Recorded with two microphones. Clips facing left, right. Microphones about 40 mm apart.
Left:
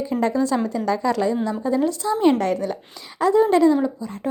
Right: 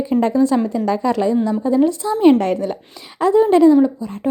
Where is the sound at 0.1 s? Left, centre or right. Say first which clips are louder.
Right 6 dB; right.